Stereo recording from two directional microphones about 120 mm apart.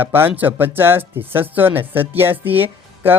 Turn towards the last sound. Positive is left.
turn(degrees=-15)  # may be behind; listen again after turning